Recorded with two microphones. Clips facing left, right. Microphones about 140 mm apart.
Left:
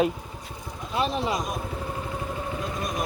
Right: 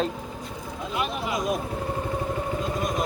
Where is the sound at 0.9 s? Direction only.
30° left (ahead or behind).